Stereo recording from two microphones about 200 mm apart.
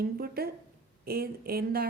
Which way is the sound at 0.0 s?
50° right (ahead or behind).